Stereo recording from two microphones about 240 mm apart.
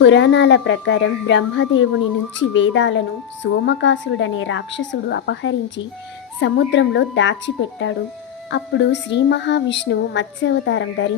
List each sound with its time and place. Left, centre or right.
0.0 s speech: left